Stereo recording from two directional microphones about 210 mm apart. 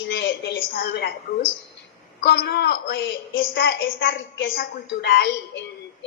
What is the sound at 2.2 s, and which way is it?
A woman's voice, 50° left (ahead or behind).